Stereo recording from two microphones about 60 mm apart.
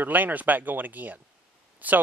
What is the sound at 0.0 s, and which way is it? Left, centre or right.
Speech, right.